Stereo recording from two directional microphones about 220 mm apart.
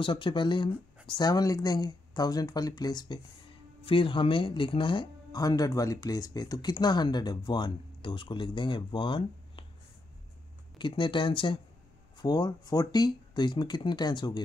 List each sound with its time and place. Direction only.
0.0 s speech: 20° left (ahead or behind)
10.8 s speech: 20° left (ahead or behind)